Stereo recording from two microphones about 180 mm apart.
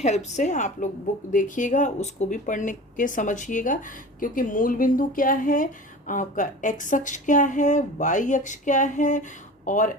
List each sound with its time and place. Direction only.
0.0 s a woman's voice: 40° left (ahead or behind)